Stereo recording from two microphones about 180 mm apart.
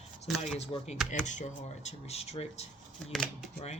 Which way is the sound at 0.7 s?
25° left (ahead or behind).